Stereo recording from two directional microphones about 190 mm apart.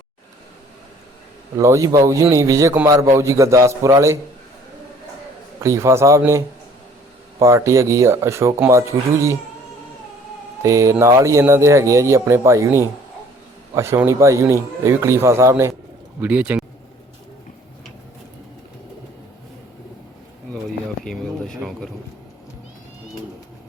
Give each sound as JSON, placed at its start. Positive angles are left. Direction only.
{"t": 1.5, "sound": "a man's voice", "side_deg": -15}
{"t": 5.6, "sound": "a man's voice", "side_deg": -15}
{"t": 10.6, "sound": "a man's voice", "side_deg": -15}
{"t": 21.0, "sound": "a sound", "side_deg": 5}